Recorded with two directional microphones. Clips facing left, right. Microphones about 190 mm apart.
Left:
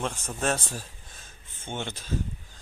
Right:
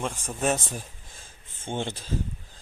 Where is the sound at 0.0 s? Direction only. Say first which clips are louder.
Right 2 dB; 5° right (ahead or behind).